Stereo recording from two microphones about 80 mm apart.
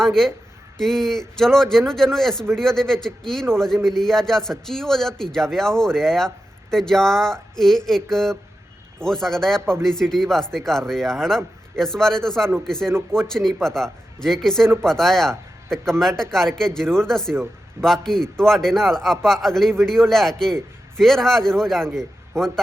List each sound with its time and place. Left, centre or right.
0.0 s a man's voice: centre
17.3 s speech: right
17.8 s a man's voice: centre